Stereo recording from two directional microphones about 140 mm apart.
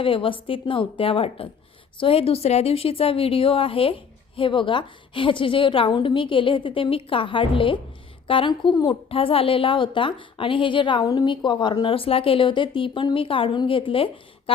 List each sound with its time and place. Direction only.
0.0 s a woman's voice: 40° left (ahead or behind)